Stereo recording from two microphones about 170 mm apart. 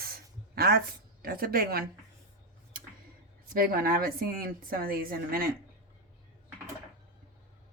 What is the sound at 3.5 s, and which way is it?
A woman's voice, 55° right (ahead or behind).